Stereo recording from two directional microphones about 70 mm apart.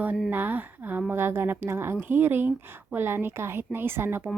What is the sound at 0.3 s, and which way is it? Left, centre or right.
A woman's voice, right.